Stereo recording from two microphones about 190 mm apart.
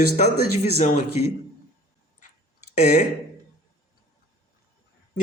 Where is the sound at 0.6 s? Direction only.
40° left (ahead or behind).